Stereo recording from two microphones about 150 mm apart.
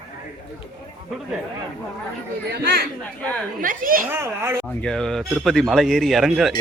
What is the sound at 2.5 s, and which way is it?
Speech, 90° right.